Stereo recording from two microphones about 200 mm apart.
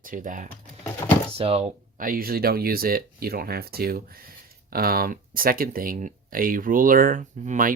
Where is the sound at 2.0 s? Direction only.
45° right (ahead or behind).